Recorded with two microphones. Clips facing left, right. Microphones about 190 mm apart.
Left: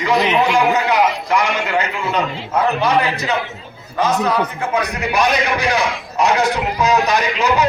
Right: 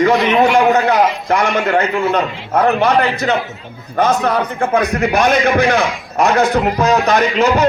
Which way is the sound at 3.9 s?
50° right (ahead or behind).